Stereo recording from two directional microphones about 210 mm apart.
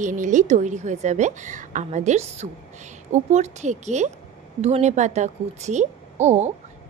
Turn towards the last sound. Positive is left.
turn(degrees=-35)  # may be behind; listen again after turning